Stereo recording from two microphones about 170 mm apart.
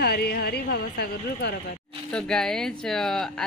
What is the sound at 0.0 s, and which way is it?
Speech, 65° left (ahead or behind).